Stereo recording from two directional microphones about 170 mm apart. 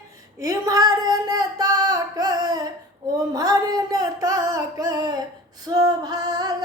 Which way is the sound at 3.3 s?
20° right (ahead or behind).